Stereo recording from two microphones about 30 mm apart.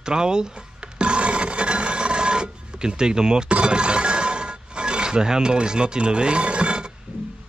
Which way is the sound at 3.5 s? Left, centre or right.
Right.